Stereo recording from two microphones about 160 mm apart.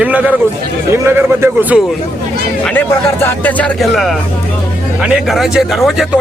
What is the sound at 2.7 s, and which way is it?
Speech, 10° left (ahead or behind).